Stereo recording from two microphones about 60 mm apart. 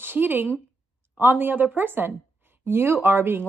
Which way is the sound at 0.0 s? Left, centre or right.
Right.